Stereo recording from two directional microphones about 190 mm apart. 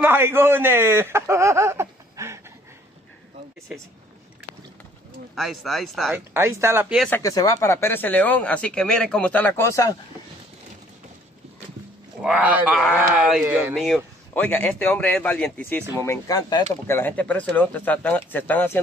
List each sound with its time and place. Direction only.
0.0 s speech: 10° right (ahead or behind)
5.3 s speech: centre (ahead or behind)
6.3 s speech: 15° right (ahead or behind)
7.1 s speech: 15° left (ahead or behind)
12.2 s speech: 5° right (ahead or behind)